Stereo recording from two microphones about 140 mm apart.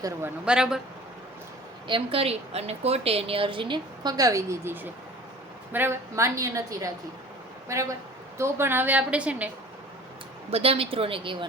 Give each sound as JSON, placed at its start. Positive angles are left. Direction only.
{"t": 0.4, "sound": "speech", "side_deg": -5}
{"t": 1.9, "sound": "a woman's voice", "side_deg": -40}
{"t": 10.5, "sound": "a woman's voice", "side_deg": -45}